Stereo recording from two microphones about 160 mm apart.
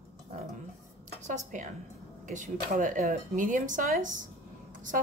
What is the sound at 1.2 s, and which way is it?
A woman's voice, 50° right (ahead or behind).